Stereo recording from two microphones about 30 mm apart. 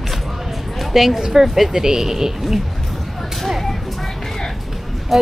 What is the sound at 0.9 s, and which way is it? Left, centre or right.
Speech, centre.